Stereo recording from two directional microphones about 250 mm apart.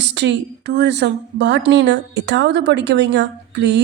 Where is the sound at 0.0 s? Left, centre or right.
Right.